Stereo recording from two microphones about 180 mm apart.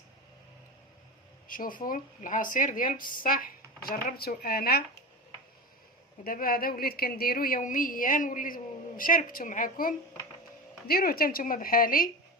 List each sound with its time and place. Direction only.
1.5 s a woman's voice: 50° left (ahead or behind)
6.2 s a woman's voice: 55° left (ahead or behind)